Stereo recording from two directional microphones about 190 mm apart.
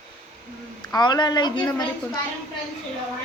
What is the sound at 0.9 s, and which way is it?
Speech, 20° left (ahead or behind).